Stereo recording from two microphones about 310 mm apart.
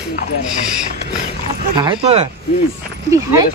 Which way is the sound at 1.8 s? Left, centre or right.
Centre.